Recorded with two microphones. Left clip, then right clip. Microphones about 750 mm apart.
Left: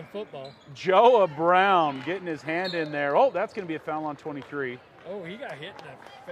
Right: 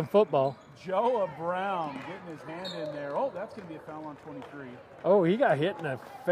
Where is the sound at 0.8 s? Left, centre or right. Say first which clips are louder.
Left 9 dB; left.